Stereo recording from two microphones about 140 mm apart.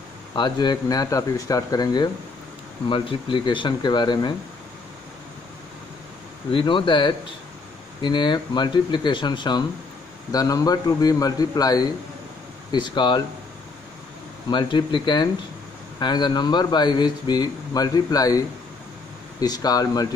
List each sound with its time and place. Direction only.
0.3 s speech: 30° left (ahead or behind)
2.9 s a man's voice: 35° left (ahead or behind)
6.5 s a man's voice: 35° left (ahead or behind)
14.5 s a man's voice: 35° left (ahead or behind)
19.4 s speech: 25° left (ahead or behind)